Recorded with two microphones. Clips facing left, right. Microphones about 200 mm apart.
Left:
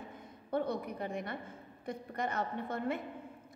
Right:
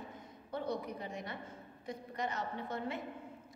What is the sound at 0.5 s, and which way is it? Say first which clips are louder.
A woman's voice: left 4 dB; 55° left (ahead or behind).